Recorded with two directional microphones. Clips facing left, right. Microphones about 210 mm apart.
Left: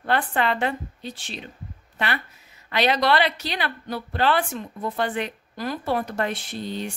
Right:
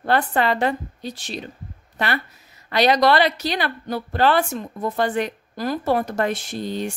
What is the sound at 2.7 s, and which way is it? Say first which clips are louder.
A woman's voice: right 4 dB; 40° right (ahead or behind).